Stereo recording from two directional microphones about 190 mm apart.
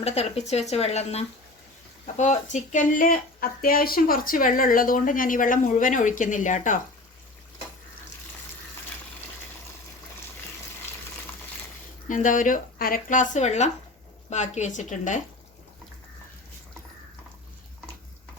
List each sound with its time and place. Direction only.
0.0 s a woman's voice: 35° left (ahead or behind)
12.0 s a woman's voice: 40° left (ahead or behind)